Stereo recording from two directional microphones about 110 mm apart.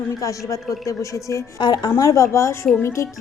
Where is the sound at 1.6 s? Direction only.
40° left (ahead or behind).